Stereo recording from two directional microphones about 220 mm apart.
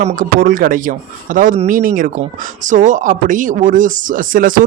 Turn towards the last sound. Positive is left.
turn(degrees=-40)  # may be behind; listen again after turning